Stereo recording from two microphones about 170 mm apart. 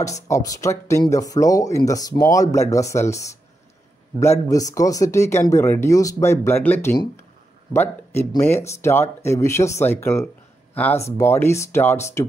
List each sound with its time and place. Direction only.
0.0 s speech: 20° left (ahead or behind)